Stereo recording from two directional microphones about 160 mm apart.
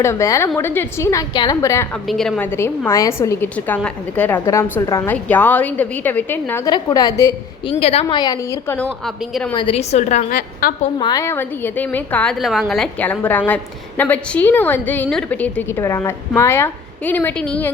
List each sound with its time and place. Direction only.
0.0 s a woman's voice: 20° left (ahead or behind)
2.0 s a woman's voice: centre (ahead or behind)
2.5 s a woman's voice: 15° left (ahead or behind)
6.7 s a woman's voice: 25° left (ahead or behind)
7.7 s a woman's voice: 40° left (ahead or behind)
8.0 s a woman's voice: 25° left (ahead or behind)
9.0 s a woman's voice: centre (ahead or behind)
9.6 s a woman's voice: 35° left (ahead or behind)
10.3 s a woman's voice: 65° left (ahead or behind)
11.0 s a woman's voice: 20° left (ahead or behind)